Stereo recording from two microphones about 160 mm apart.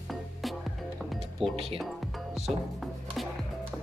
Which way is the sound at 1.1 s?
Centre (ahead or behind).